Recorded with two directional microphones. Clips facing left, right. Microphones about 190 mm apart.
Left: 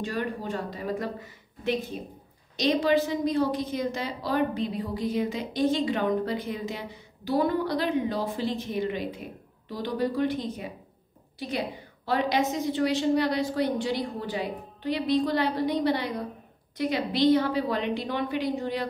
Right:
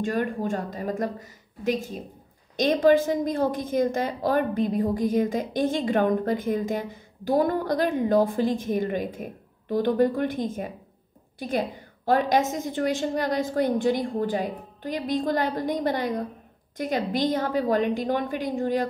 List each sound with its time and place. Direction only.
0.0 s a woman's voice: 45° right (ahead or behind)